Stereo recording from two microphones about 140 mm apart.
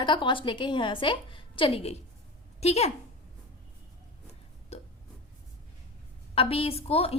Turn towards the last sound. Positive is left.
turn(degrees=45)  # may be behind; listen again after turning